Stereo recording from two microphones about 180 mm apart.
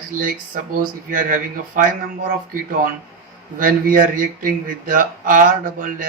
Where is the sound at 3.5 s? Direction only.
50° right (ahead or behind).